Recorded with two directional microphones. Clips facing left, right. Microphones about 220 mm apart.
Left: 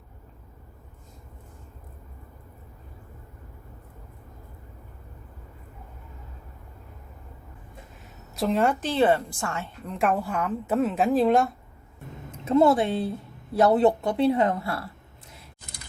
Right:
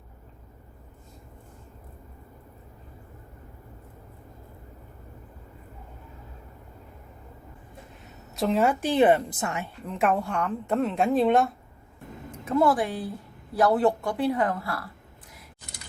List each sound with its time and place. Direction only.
8.4 s a woman's voice: centre (ahead or behind); by 9.6 s 20° right (ahead or behind)
9.8 s a woman's voice: centre (ahead or behind)
12.5 s a woman's voice: 25° left (ahead or behind)